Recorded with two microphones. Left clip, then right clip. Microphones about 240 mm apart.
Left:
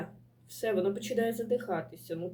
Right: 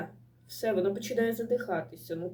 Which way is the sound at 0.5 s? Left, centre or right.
Centre.